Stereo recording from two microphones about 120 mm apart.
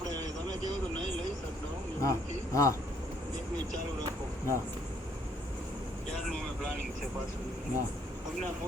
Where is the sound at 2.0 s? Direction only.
25° left (ahead or behind).